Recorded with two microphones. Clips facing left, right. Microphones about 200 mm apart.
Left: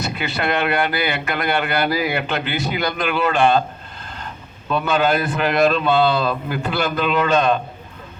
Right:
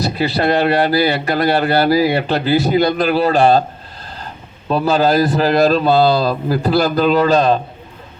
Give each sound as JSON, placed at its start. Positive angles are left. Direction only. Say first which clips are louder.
{"t": 0.0, "sound": "speech", "louder": "right 7 dB", "side_deg": -35}
{"t": 4.7, "sound": "speech", "louder": "right 4 dB", "side_deg": -35}